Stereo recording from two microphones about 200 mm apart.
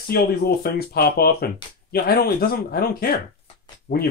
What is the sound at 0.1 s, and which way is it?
Speech, 50° left (ahead or behind).